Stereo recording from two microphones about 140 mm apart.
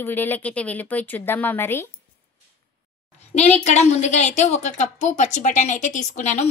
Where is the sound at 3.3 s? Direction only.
55° left (ahead or behind).